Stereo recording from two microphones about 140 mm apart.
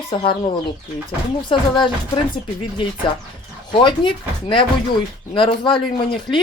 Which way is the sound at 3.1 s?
35° left (ahead or behind).